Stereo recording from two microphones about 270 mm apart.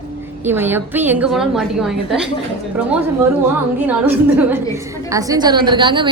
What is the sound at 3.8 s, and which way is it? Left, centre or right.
A woman's voice, centre.